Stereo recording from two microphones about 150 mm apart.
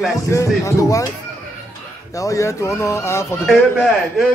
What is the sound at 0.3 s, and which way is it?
Speech, 20° left (ahead or behind).